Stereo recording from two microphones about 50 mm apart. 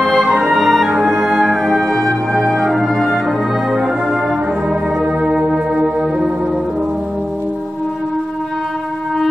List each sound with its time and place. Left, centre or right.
0.0 s music: centre
3.1 s music: centre